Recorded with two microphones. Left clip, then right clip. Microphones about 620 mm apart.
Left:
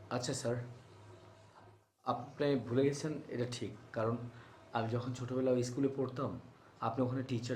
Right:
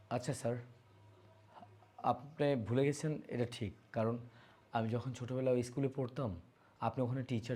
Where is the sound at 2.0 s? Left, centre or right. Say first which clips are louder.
Right 1 dB; right.